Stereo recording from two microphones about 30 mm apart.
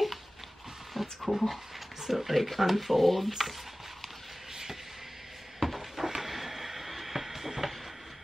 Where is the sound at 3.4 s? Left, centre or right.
Centre.